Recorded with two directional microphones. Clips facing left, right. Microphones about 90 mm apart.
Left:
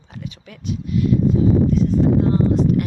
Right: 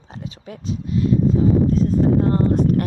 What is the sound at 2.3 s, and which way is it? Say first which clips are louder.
Speech: even; 50° right (ahead or behind).